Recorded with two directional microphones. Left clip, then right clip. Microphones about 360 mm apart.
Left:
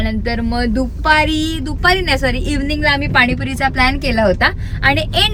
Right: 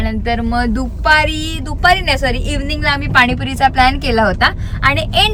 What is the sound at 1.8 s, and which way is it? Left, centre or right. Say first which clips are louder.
Speech: right 2 dB; centre.